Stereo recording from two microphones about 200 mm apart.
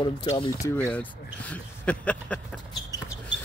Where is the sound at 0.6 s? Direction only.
10° left (ahead or behind).